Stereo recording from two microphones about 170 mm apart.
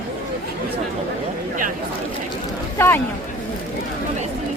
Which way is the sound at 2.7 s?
15° left (ahead or behind).